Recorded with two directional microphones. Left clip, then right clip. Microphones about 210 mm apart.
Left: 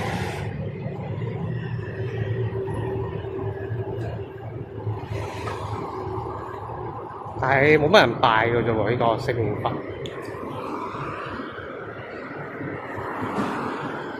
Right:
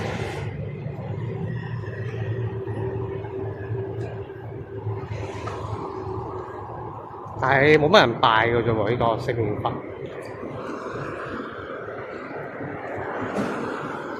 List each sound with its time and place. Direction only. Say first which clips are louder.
7.4 s speech: right 1 dB; 10° right (ahead or behind)